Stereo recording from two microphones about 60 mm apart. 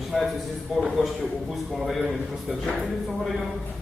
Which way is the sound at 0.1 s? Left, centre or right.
Centre.